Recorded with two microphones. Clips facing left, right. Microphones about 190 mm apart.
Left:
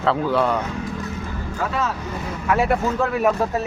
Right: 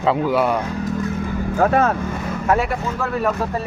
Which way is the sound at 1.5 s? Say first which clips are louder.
Right 8 dB; 55° right (ahead or behind).